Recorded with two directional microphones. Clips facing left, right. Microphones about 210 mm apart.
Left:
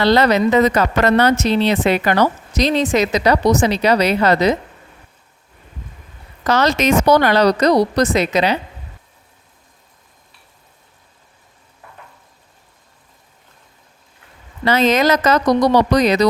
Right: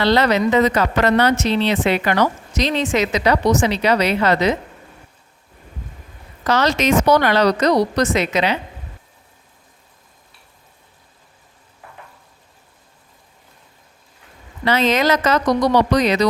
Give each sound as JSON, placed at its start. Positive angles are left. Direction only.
{"t": 0.0, "sound": "a woman's voice", "side_deg": 45}
{"t": 6.4, "sound": "a woman's voice", "side_deg": 45}
{"t": 14.6, "sound": "a woman's voice", "side_deg": 45}